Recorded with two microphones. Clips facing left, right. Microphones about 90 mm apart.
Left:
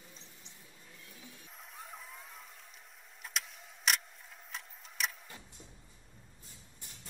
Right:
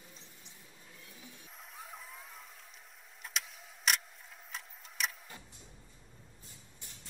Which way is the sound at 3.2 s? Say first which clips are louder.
Even; centre (ahead or behind).